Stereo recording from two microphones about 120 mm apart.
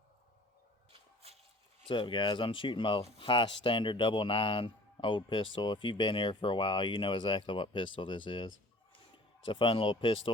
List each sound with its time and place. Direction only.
1.9 s speech: 45° left (ahead or behind)